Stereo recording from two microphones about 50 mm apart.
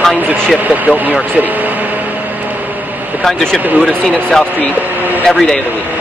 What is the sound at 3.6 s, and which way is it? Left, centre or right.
Speech, right.